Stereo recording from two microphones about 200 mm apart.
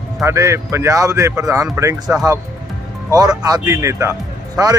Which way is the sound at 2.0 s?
Centre (ahead or behind).